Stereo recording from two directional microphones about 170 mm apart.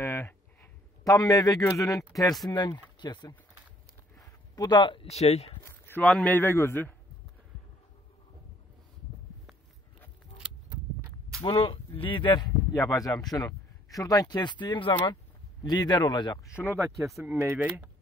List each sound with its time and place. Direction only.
0.0 s a sound: 15° left (ahead or behind)
2.5 s speech: 25° left (ahead or behind)
5.7 s a sound: 15° left (ahead or behind)
6.0 s a man's voice: 5° left (ahead or behind)
11.4 s speech: 30° left (ahead or behind)
16.6 s speech: 15° right (ahead or behind)